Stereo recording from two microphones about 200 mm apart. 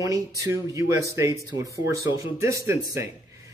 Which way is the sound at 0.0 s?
15° right (ahead or behind).